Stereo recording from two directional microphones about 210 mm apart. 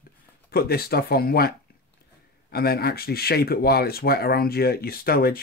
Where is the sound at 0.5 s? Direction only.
45° left (ahead or behind).